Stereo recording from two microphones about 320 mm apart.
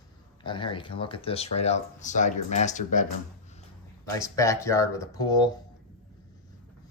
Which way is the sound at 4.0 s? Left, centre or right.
Centre.